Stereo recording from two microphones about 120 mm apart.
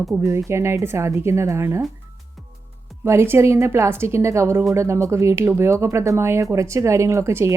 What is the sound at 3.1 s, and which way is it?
Speech, 20° right (ahead or behind).